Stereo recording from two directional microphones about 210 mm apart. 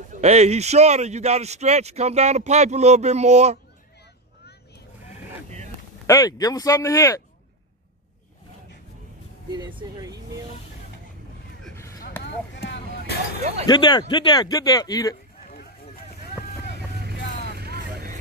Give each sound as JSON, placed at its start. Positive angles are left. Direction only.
{"t": 0.1, "sound": "a man's voice", "side_deg": -30}
{"t": 6.0, "sound": "speech", "side_deg": 15}
{"t": 9.5, "sound": "vehicle", "side_deg": -20}
{"t": 12.2, "sound": "a sound", "side_deg": 55}
{"t": 13.7, "sound": "speech", "side_deg": 20}
{"t": 17.6, "sound": "vehicle", "side_deg": -50}